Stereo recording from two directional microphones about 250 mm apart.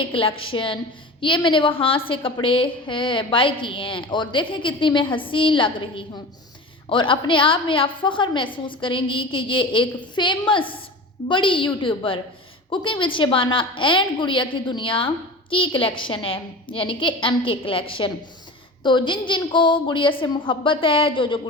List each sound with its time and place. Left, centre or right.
0.1 s a woman's voice: left